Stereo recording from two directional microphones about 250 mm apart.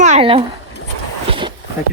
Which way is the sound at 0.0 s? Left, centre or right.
Right.